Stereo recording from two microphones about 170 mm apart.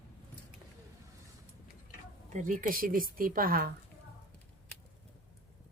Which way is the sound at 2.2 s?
50° right (ahead or behind).